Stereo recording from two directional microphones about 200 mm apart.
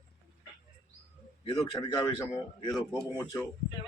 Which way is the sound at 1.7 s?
15° left (ahead or behind).